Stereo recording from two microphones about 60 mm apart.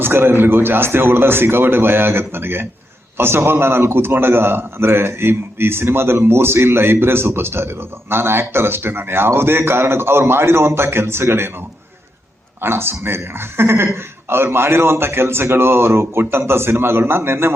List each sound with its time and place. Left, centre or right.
0.0 s a man's voice: right
12.6 s a man's voice: right